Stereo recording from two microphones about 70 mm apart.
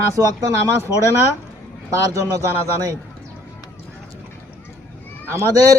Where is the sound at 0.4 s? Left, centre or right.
Right.